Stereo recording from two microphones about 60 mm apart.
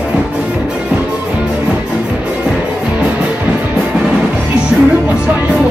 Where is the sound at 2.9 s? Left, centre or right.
Centre.